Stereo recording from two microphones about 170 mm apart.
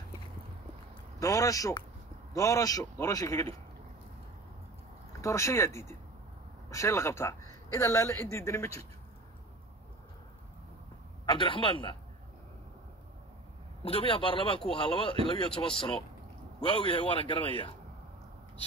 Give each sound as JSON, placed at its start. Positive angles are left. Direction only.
{"t": 1.2, "sound": "a man's voice", "side_deg": 20}
{"t": 5.2, "sound": "a woman's voice", "side_deg": 15}
{"t": 11.2, "sound": "a man's voice", "side_deg": 30}
{"t": 13.8, "sound": "a man's voice", "side_deg": 35}